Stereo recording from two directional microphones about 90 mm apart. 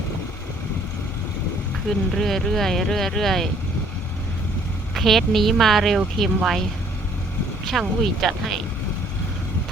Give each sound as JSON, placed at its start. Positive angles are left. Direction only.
{"t": 2.1, "sound": "speech", "side_deg": 5}
{"t": 4.9, "sound": "speech", "side_deg": 0}
{"t": 7.7, "sound": "speech", "side_deg": 0}